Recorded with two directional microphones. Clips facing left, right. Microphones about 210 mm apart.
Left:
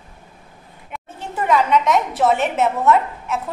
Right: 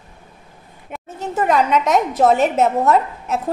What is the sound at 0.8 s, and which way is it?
A woman's voice, 40° right (ahead or behind).